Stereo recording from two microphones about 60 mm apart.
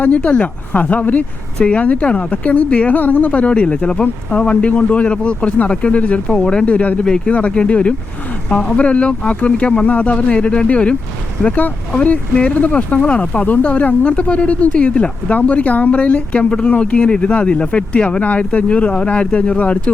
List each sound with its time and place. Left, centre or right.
0.2 s speech: left